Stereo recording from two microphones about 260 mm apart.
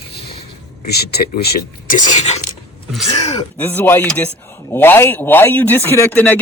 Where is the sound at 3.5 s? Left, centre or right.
Centre.